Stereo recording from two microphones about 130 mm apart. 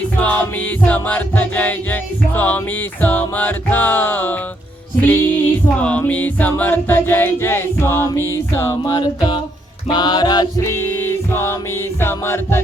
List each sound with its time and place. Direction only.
0.2 s music: 10° left (ahead or behind)
9.0 s music: 35° left (ahead or behind)
10.7 s music: 15° left (ahead or behind)